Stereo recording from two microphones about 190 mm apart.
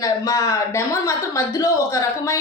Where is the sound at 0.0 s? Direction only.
15° left (ahead or behind).